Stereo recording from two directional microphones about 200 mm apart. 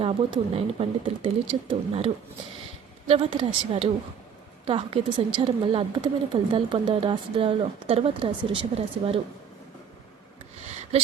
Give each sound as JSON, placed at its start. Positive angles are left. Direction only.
{"t": 0.0, "sound": "a woman's voice", "side_deg": -30}
{"t": 3.1, "sound": "a woman's voice", "side_deg": -25}
{"t": 10.7, "sound": "a sound", "side_deg": -35}